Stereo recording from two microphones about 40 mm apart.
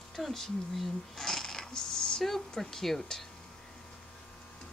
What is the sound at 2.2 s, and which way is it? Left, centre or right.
Speech, centre.